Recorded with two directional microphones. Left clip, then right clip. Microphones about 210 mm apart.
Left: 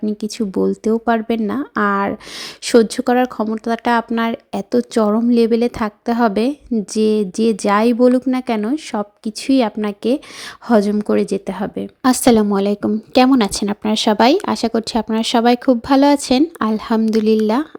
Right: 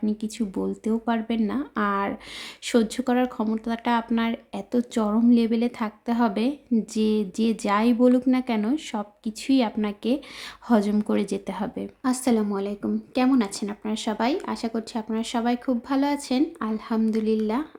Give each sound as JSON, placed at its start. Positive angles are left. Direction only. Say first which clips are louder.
{"t": 0.0, "sound": "speech", "louder": "left 7 dB", "side_deg": 25}
{"t": 12.0, "sound": "speech", "louder": "left 11 dB", "side_deg": 35}